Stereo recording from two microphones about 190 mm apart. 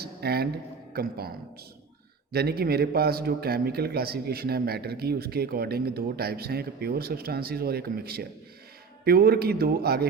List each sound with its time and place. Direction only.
0.0 s a sound: 55° right (ahead or behind)
0.9 s a man's voice: 55° right (ahead or behind)
2.3 s a man's voice: 55° right (ahead or behind)